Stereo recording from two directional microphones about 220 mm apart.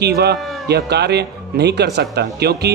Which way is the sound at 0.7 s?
50° right (ahead or behind).